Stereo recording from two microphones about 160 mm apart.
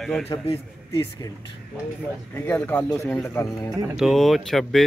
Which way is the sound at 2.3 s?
15° left (ahead or behind).